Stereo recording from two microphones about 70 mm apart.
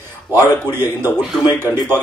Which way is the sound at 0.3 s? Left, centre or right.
Right.